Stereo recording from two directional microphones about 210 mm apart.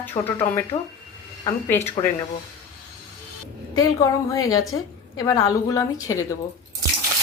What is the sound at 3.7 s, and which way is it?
Speech, 15° left (ahead or behind).